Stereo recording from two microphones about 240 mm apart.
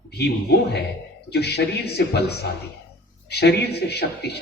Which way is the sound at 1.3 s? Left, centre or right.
Left.